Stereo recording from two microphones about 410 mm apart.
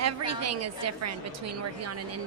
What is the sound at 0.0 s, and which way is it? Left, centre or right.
A woman's voice, right.